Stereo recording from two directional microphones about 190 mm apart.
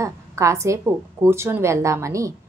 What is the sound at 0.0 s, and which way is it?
A woman's voice, 15° right (ahead or behind).